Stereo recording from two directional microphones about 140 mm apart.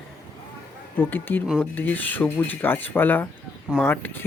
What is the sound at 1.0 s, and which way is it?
Speech, 15° left (ahead or behind).